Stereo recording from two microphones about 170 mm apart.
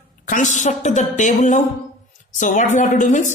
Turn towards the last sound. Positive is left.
turn(degrees=45)  # may be behind; listen again after turning